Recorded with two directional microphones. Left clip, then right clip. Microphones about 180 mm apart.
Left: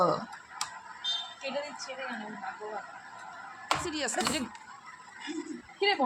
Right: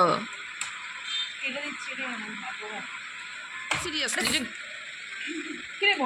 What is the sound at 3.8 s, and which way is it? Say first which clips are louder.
Speech: right 4 dB; 35° left (ahead or behind).